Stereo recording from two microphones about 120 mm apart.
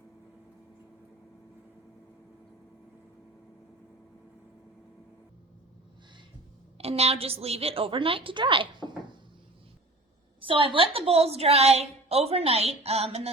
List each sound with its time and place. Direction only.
6.7 s a woman's voice: 60° right (ahead or behind); by 8.9 s 45° right (ahead or behind)
10.4 s a woman's voice: 45° right (ahead or behind)